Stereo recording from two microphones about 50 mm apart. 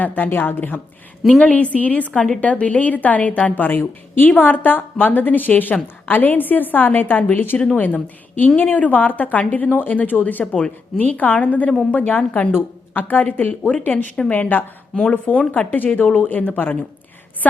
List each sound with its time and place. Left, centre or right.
0.0 s a woman's voice: left
13.5 s a woman's voice: left
15.1 s a woman's voice: left